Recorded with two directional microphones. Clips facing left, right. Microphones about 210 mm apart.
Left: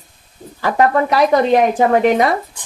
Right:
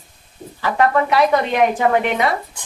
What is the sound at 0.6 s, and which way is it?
Speech, 40° left (ahead or behind).